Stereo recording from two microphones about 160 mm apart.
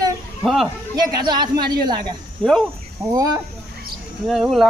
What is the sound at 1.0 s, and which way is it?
Speech, 25° right (ahead or behind).